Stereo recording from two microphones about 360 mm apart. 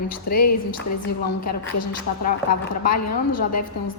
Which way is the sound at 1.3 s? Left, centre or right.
Left.